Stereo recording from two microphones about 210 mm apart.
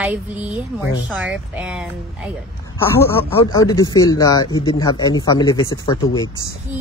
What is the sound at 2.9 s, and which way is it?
Speech, 15° left (ahead or behind).